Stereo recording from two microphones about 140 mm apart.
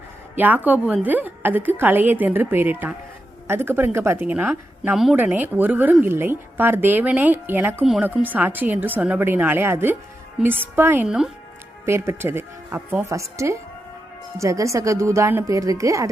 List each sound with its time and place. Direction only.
0.3 s a woman's voice: 10° right (ahead or behind)
5.1 s a woman's voice: 15° right (ahead or behind)
11.9 s speech: 20° right (ahead or behind)